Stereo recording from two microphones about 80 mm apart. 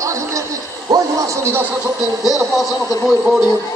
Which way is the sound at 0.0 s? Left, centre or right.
Right.